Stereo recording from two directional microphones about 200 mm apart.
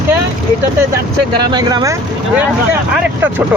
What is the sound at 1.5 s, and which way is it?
Speech, 20° right (ahead or behind).